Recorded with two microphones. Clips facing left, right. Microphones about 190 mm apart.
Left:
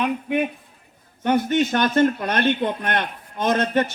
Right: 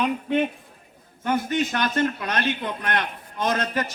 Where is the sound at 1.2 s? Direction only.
25° left (ahead or behind).